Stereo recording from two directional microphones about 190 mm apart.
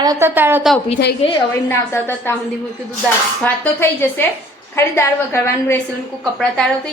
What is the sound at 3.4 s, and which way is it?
A woman's voice, 10° left (ahead or behind).